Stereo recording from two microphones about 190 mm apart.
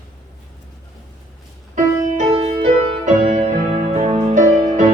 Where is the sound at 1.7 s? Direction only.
35° right (ahead or behind).